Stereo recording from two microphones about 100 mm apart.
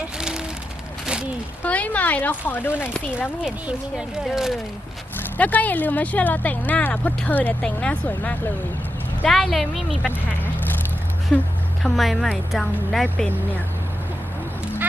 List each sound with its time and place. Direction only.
0.0 s vehicle: 5° right (ahead or behind)
1.6 s speech: 15° left (ahead or behind)
3.4 s speech: 5° right (ahead or behind)
5.4 s speech: 15° left (ahead or behind)
9.2 s a woman's voice: centre (ahead or behind)
11.3 s a woman's voice: 10° left (ahead or behind)